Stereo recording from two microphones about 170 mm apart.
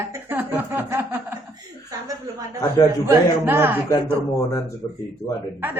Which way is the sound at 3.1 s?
15° right (ahead or behind).